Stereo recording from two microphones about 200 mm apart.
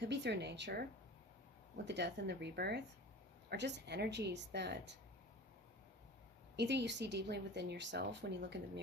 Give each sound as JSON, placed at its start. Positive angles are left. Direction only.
{"t": 0.0, "sound": "speech", "side_deg": -60}
{"t": 6.6, "sound": "speech", "side_deg": -60}